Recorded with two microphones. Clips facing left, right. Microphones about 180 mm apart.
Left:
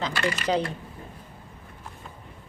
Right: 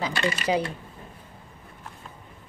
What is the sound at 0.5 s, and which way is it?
Speech, 10° right (ahead or behind).